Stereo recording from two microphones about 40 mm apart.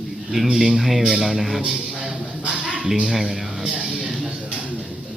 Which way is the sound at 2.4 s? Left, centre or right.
Right.